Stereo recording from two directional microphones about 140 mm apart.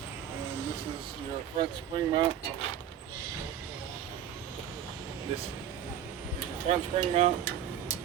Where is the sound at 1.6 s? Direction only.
35° right (ahead or behind).